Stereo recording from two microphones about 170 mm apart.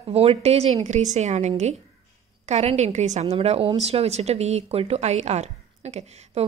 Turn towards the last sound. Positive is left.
turn(degrees=-40)  # may be behind; listen again after turning